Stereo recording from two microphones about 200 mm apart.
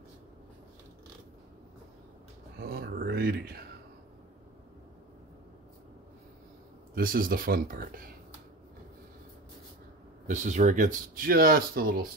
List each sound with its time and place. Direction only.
2.6 s a sound: 50° right (ahead or behind)
7.0 s speech: 45° right (ahead or behind)
10.2 s speech: 40° right (ahead or behind)